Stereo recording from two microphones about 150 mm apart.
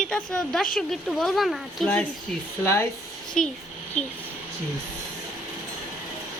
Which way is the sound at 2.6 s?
20° left (ahead or behind).